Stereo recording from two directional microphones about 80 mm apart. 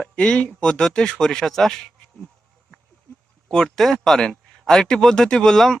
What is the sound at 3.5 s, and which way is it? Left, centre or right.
Speech, centre.